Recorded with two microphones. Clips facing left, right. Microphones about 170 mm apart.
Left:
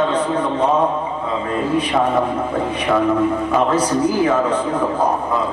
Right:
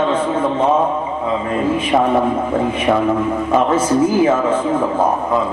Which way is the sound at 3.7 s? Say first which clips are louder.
Right 3 dB; 25° right (ahead or behind).